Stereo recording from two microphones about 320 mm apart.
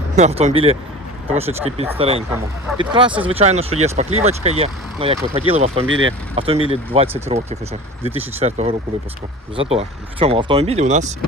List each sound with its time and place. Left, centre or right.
0.2 s speech: right
5.8 s speech: right
6.3 s speech: centre